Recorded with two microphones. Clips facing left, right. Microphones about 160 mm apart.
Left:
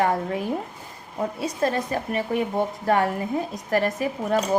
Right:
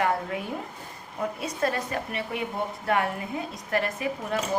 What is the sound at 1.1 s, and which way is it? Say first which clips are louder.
Speech: left 4 dB; 30° left (ahead or behind).